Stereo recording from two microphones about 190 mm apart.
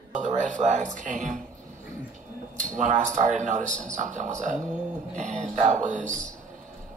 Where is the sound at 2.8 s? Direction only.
40° right (ahead or behind).